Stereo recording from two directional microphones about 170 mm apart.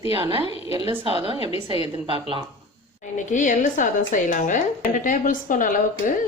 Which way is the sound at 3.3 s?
50° left (ahead or behind).